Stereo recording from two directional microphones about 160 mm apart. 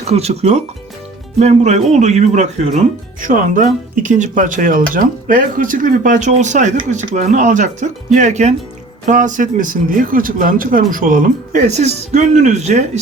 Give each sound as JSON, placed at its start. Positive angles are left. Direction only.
{"t": 0.1, "sound": "speech", "side_deg": -40}